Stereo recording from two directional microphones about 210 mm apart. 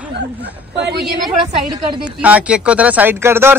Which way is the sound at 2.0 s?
5° right (ahead or behind).